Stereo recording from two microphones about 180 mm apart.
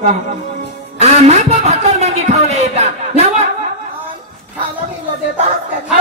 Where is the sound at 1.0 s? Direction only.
35° right (ahead or behind).